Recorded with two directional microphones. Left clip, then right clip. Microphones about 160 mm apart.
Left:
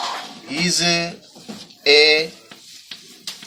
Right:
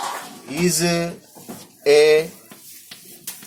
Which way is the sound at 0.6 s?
25° right (ahead or behind).